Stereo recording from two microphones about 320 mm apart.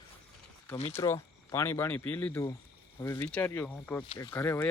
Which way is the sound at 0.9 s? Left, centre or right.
Centre.